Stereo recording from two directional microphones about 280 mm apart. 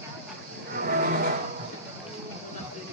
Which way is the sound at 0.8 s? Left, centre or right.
Right.